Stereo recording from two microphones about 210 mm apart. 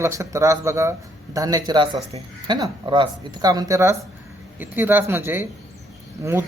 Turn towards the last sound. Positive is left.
turn(degrees=-15)  # may be behind; listen again after turning